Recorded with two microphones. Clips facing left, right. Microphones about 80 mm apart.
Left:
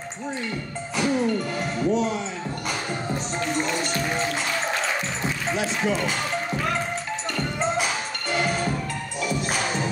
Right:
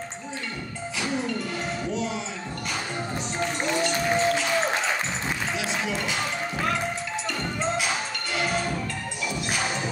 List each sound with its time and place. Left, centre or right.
1.9 s speech: left
5.6 s speech: left